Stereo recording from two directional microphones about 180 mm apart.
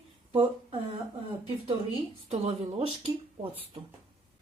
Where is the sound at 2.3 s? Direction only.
35° right (ahead or behind).